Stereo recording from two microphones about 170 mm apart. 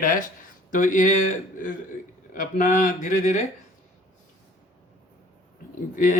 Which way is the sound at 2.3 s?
50° left (ahead or behind).